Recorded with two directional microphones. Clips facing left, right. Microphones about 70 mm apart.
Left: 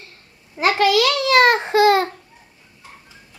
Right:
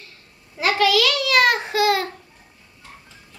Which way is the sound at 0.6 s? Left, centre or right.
Left.